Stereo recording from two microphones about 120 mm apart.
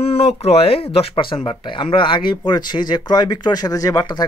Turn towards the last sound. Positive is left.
turn(degrees=35)  # may be behind; listen again after turning